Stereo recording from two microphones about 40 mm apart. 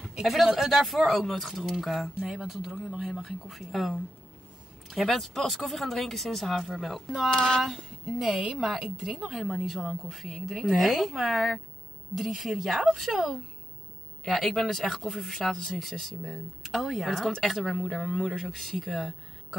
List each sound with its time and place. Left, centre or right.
0.2 s a woman's voice: centre
4.8 s speech: centre
5.5 s speech: centre
7.2 s speech: centre
7.6 s a woman's voice: centre
9.3 s speech: centre
14.2 s speech: centre